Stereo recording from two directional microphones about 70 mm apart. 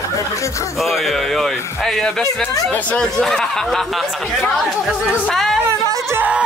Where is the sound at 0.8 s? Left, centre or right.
Centre.